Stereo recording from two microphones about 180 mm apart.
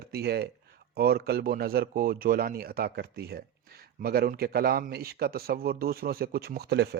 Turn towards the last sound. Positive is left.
turn(degrees=-65)  # may be behind; listen again after turning